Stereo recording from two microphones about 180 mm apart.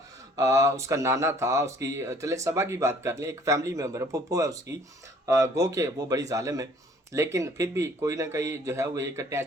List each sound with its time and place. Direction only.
0.3 s speech: 15° right (ahead or behind)